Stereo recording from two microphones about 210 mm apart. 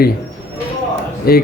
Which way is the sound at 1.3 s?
45° left (ahead or behind).